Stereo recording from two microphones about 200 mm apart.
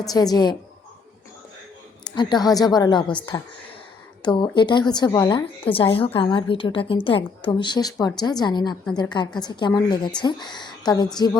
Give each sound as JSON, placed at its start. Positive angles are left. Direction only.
{"t": 0.0, "sound": "a woman's voice", "side_deg": 20}
{"t": 2.0, "sound": "a woman's voice", "side_deg": 20}
{"t": 4.2, "sound": "a woman's voice", "side_deg": 20}